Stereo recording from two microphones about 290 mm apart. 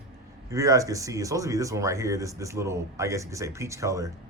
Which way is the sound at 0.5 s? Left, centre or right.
Centre.